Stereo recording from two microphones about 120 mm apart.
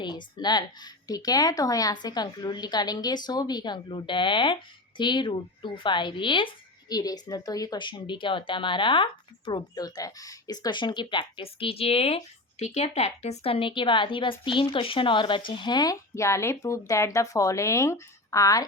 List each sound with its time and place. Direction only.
0.3 s speech: 35° left (ahead or behind)